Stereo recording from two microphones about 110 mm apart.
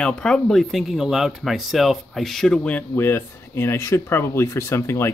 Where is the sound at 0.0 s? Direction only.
5° left (ahead or behind).